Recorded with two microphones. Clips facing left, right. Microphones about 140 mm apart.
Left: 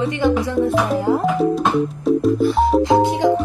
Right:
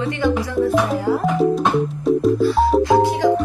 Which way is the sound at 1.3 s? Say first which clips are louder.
Even; centre (ahead or behind).